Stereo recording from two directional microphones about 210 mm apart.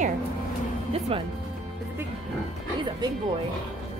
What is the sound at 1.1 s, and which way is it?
Speech, 25° right (ahead or behind).